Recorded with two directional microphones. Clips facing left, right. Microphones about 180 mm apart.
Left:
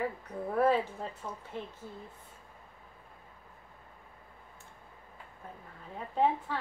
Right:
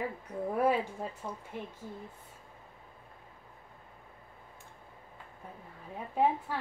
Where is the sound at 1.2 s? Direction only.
15° right (ahead or behind).